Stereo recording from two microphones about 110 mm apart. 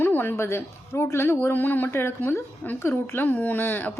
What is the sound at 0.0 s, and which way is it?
A woman's voice, 20° left (ahead or behind).